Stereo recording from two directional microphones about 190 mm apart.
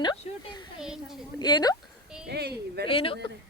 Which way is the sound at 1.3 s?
20° left (ahead or behind).